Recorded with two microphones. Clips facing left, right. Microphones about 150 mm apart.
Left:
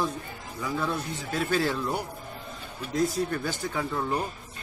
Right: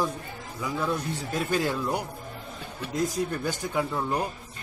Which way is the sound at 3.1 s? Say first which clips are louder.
Even; 15° right (ahead or behind).